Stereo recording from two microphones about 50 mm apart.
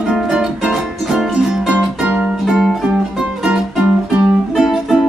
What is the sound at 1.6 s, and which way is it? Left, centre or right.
Music, right.